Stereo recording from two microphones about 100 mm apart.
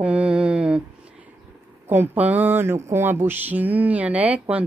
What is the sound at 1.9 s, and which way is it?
A woman's voice, 20° right (ahead or behind).